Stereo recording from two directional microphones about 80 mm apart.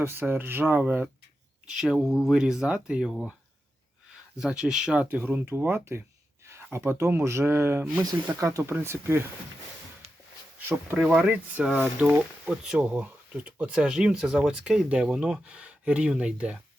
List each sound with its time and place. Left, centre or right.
0.0 s speech: right
1.7 s speech: centre
4.4 s speech: centre
5.0 s speech: right
8.4 s speech: right
10.9 s speech: centre